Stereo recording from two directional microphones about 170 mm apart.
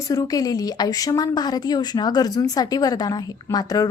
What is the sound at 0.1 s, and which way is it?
Speech, 20° left (ahead or behind).